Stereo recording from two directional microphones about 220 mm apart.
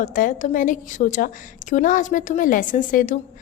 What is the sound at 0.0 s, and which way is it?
A woman's voice, 35° left (ahead or behind).